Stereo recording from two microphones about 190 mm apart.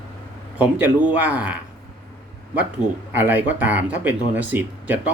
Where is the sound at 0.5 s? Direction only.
10° right (ahead or behind).